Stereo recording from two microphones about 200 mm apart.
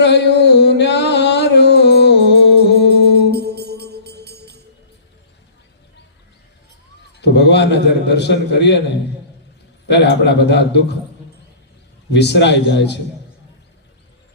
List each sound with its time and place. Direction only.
0.0 s music: 60° left (ahead or behind)
3.2 s music: 55° right (ahead or behind)
7.2 s a man's voice: 60° left (ahead or behind)
9.9 s a man's voice: 60° left (ahead or behind)
12.1 s a man's voice: 60° left (ahead or behind)